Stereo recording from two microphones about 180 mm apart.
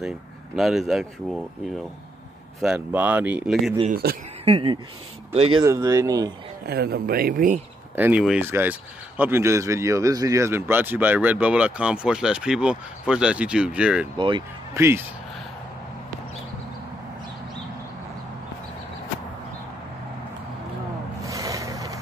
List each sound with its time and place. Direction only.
0.6 s a man's voice: centre (ahead or behind)
2.6 s speech: 5° right (ahead or behind)
3.9 s speech: 60° right (ahead or behind)
4.5 s speech: 30° right (ahead or behind)
5.6 s speech: 20° right (ahead or behind)
6.7 s speech: 60° right (ahead or behind)
7.9 s speech: 10° right (ahead or behind)
14.1 s speech: 25° right (ahead or behind)
14.8 s speech: 15° right (ahead or behind)
21.2 s boat: 20° right (ahead or behind)